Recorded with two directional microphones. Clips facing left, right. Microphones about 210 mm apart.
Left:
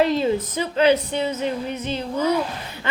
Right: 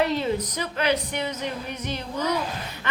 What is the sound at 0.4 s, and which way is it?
Speech, 25° left (ahead or behind).